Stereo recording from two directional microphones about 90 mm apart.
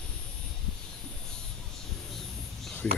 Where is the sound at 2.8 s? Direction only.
10° left (ahead or behind).